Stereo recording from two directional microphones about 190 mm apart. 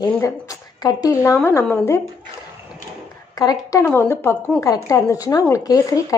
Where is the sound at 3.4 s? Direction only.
20° left (ahead or behind).